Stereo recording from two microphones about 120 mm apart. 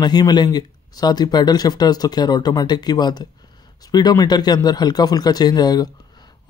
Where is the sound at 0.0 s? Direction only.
35° left (ahead or behind).